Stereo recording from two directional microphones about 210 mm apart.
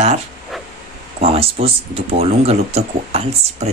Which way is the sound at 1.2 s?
30° right (ahead or behind).